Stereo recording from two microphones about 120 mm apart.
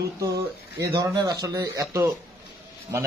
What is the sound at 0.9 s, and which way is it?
Speech, 35° right (ahead or behind).